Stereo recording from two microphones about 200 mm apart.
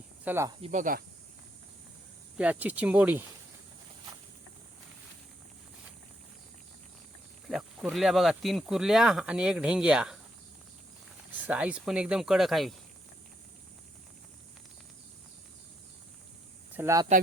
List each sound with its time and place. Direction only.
0.3 s speech: 15° right (ahead or behind)
0.6 s speech: 40° right (ahead or behind)
2.4 s speech: 5° right (ahead or behind)
7.4 s speech: centre (ahead or behind)
11.3 s speech: 5° right (ahead or behind)
16.7 s speech: 15° right (ahead or behind)